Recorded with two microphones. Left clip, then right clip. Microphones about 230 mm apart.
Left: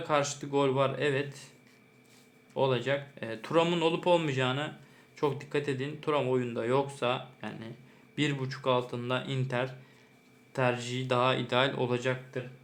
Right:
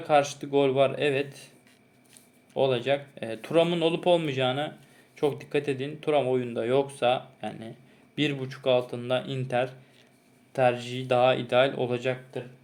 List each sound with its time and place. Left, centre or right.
0.0 s speech: centre
2.5 s speech: centre